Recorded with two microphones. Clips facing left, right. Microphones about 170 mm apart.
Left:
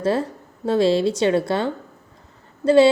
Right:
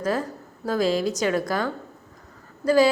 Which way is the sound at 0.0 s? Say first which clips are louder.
Left 4 dB; 30° left (ahead or behind).